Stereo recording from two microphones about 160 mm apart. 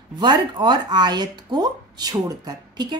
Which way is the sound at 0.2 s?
30° right (ahead or behind).